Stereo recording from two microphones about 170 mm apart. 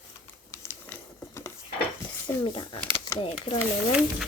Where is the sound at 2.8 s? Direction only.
15° left (ahead or behind).